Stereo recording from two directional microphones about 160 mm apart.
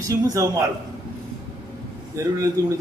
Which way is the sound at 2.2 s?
20° right (ahead or behind).